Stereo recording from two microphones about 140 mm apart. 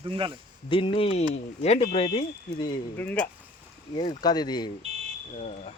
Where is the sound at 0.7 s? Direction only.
40° left (ahead or behind).